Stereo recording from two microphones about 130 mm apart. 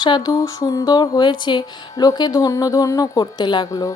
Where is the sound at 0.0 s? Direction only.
30° left (ahead or behind).